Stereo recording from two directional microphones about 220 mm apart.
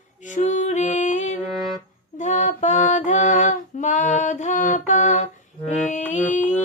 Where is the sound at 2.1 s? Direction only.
35° left (ahead or behind).